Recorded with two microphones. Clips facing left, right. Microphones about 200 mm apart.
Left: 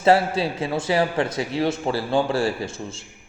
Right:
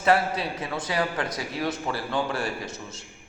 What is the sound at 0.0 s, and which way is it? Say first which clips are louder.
A man's voice: left 5 dB; 30° left (ahead or behind).